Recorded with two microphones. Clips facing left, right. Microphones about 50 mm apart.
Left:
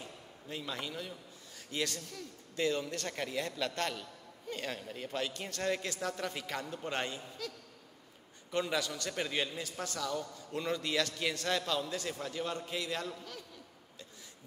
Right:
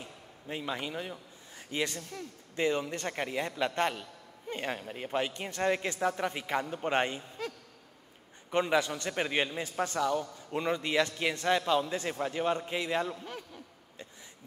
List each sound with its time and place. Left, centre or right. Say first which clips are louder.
0.0 s a man's voice: right 2 dB; right